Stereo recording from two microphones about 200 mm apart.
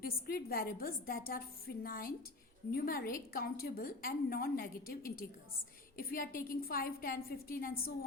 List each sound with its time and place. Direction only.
0.0 s a woman's voice: 50° left (ahead or behind)